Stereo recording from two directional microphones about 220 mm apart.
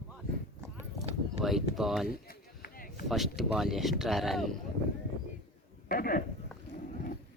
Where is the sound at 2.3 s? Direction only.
40° left (ahead or behind).